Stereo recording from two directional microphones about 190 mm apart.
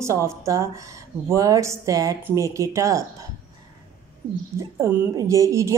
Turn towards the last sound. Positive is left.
turn(degrees=-15)  # may be behind; listen again after turning